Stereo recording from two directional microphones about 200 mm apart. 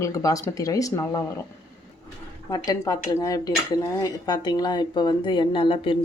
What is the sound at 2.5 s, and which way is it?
Speech, 20° left (ahead or behind).